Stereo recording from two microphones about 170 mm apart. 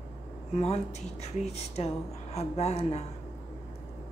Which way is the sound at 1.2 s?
40° left (ahead or behind).